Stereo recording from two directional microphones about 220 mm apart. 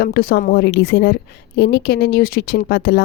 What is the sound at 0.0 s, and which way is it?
A woman's voice, 45° left (ahead or behind).